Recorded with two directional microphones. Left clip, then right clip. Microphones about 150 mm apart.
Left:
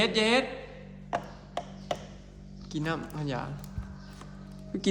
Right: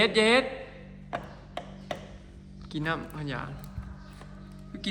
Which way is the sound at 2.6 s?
20° left (ahead or behind).